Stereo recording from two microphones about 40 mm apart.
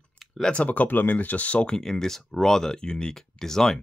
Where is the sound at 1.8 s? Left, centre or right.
Centre.